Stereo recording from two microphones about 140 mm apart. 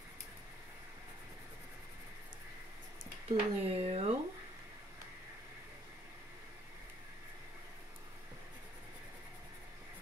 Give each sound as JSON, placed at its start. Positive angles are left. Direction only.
{"t": 3.3, "sound": "speech", "side_deg": -45}